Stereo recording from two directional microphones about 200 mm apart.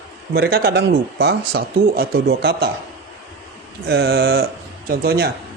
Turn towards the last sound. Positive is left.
turn(degrees=-50)  # may be behind; listen again after turning